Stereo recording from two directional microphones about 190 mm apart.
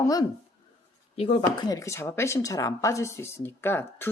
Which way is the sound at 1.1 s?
30° left (ahead or behind).